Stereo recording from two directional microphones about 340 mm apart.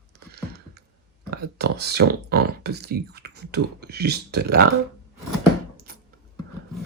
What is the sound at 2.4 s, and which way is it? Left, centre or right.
Speech, right.